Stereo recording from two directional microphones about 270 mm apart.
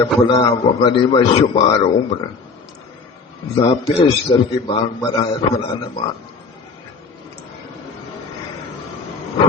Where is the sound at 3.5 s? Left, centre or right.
Left.